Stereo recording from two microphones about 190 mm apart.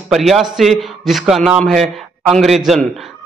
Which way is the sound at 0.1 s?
Centre (ahead or behind).